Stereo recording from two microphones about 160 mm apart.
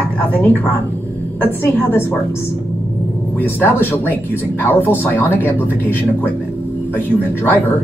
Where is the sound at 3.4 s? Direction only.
15° left (ahead or behind).